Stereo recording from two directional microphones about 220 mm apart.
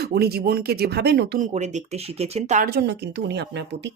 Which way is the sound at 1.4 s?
30° right (ahead or behind).